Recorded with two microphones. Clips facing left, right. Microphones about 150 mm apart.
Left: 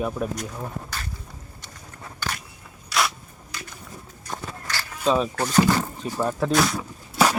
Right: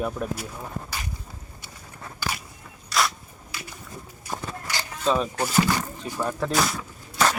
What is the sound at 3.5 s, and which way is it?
Bird, 10° right (ahead or behind).